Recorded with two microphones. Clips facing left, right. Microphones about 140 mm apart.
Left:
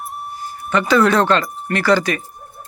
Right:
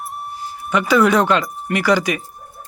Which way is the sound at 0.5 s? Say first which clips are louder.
Even; 5° right (ahead or behind).